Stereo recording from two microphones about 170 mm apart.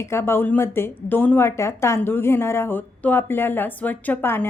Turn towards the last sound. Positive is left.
turn(degrees=10)  # may be behind; listen again after turning